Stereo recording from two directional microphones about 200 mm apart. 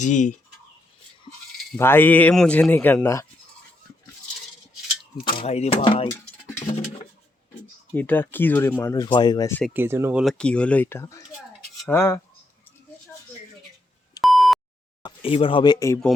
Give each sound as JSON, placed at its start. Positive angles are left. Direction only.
{"t": 0.0, "sound": "fowl", "side_deg": 40}
{"t": 1.7, "sound": "speech", "side_deg": 10}
{"t": 5.4, "sound": "speech", "side_deg": 30}
{"t": 6.7, "sound": "a sound", "side_deg": 30}
{"t": 7.9, "sound": "speech", "side_deg": 10}
{"t": 9.7, "sound": "speech", "side_deg": -10}
{"t": 14.2, "sound": "beep", "side_deg": 0}
{"t": 15.0, "sound": "speech", "side_deg": 25}